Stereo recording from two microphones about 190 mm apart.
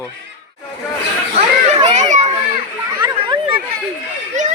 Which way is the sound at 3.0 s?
25° right (ahead or behind).